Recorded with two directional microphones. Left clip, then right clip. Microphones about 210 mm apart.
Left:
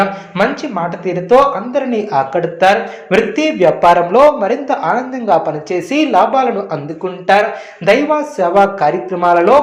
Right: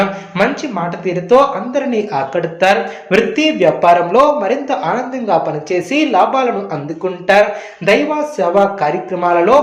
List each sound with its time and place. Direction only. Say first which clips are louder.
0.0 s speech: left 1 dB; 5° left (ahead or behind)